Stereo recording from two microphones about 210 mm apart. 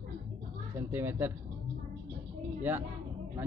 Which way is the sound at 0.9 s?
10° right (ahead or behind).